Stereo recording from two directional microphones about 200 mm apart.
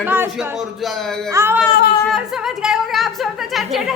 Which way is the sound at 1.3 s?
10° right (ahead or behind).